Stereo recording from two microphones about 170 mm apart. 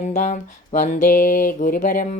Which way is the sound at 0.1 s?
45° left (ahead or behind).